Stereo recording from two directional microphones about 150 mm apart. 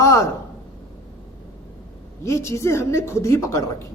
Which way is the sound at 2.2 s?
20° left (ahead or behind).